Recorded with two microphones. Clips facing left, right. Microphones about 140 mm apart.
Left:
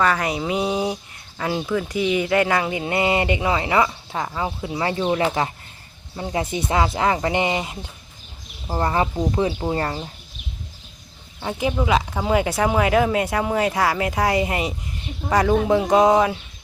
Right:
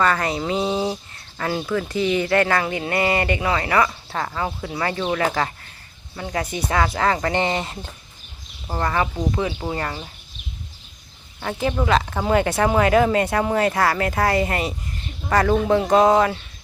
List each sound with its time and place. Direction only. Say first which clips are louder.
0.0 s speech: even; 10° left (ahead or behind)
8.8 s speech: left 1 dB; 25° left (ahead or behind)
11.3 s speech: even; 15° left (ahead or behind)